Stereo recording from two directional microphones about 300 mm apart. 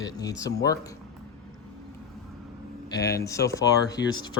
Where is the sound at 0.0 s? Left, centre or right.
Centre.